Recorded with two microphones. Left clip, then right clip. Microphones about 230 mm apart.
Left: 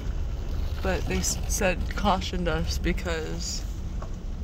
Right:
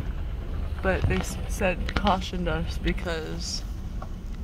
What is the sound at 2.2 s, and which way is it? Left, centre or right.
Speech, centre.